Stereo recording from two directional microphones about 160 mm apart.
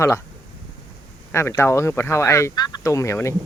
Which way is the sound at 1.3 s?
15° left (ahead or behind).